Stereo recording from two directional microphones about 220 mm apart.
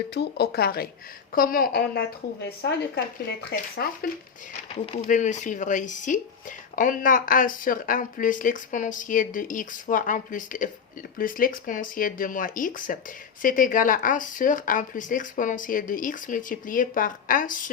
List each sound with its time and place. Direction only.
0.1 s a woman's voice: 50° left (ahead or behind)